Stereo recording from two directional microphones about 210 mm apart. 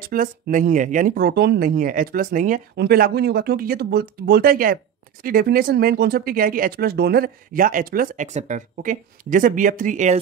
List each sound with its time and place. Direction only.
0.0 s speech: 40° right (ahead or behind)